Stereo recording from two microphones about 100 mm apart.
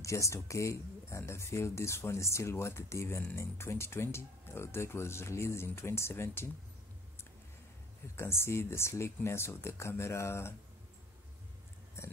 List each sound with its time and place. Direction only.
0.0 s speech: 30° left (ahead or behind)
8.2 s speech: 25° left (ahead or behind)
12.0 s speech: 30° left (ahead or behind)